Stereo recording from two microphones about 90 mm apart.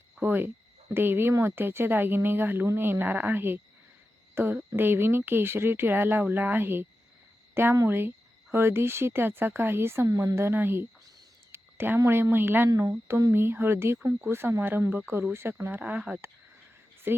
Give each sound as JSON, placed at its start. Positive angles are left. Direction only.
{"t": 0.2, "sound": "speech", "side_deg": -25}
{"t": 11.5, "sound": "a sound", "side_deg": -25}
{"t": 12.0, "sound": "speech", "side_deg": -25}